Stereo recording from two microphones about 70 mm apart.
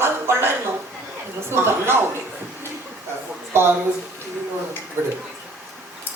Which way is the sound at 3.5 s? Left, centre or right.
Right.